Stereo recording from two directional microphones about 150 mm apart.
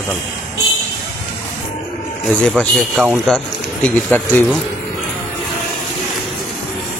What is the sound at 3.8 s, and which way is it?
Speech, 10° left (ahead or behind).